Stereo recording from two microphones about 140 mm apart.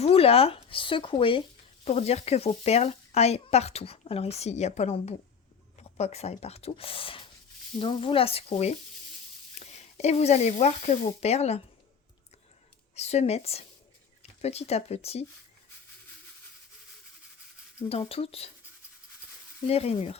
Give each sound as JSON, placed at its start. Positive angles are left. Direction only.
{"t": 0.0, "sound": "speech", "side_deg": 45}
{"t": 13.0, "sound": "speech", "side_deg": 50}
{"t": 18.1, "sound": "speech", "side_deg": 45}
{"t": 19.6, "sound": "speech", "side_deg": 45}